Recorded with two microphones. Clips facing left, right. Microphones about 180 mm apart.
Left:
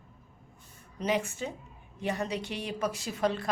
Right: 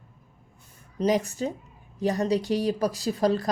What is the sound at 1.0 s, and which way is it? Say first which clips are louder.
Speech: right 6 dB; 40° right (ahead or behind).